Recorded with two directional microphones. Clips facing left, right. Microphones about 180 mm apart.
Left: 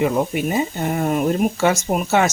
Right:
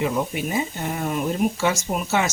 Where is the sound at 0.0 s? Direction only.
50° left (ahead or behind).